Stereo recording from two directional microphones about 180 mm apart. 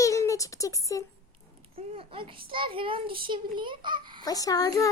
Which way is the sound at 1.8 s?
30° right (ahead or behind).